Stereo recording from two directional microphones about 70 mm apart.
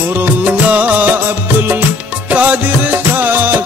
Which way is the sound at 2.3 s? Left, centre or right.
Right.